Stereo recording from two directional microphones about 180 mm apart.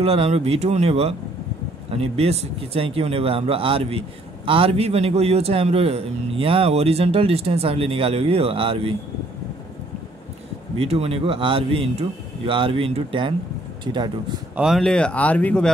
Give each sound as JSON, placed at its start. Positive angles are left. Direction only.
{"t": 0.0, "sound": "a man's voice", "side_deg": -35}
{"t": 10.8, "sound": "a man's voice", "side_deg": -35}
{"t": 14.6, "sound": "speech", "side_deg": 0}